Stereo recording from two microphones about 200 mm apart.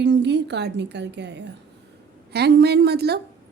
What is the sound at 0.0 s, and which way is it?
A woman's voice, 60° right (ahead or behind).